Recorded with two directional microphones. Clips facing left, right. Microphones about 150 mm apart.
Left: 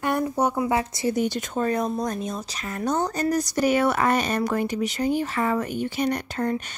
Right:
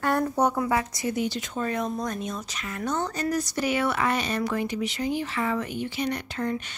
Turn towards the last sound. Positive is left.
turn(degrees=40)  # may be behind; listen again after turning